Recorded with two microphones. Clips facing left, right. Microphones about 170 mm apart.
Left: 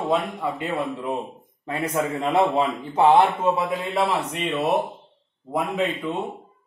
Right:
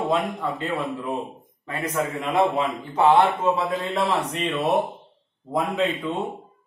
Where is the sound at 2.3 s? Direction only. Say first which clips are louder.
Left 1 dB; 30° left (ahead or behind).